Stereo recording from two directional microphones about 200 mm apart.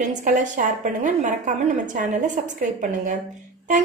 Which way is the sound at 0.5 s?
40° right (ahead or behind).